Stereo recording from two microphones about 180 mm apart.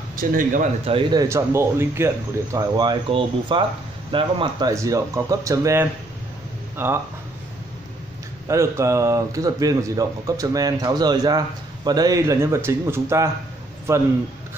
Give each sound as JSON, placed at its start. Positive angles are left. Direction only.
{"t": 0.1, "sound": "a man's voice", "side_deg": -50}
{"t": 0.8, "sound": "a man's voice", "side_deg": -30}
{"t": 1.2, "sound": "speech", "side_deg": -15}
{"t": 8.5, "sound": "a man's voice", "side_deg": -15}